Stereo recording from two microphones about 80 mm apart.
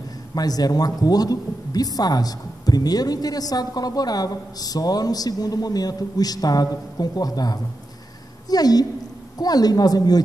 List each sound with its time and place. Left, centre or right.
0.3 s a woman's voice: left